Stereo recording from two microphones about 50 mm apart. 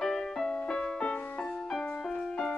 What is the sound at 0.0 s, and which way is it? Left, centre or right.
Music, centre.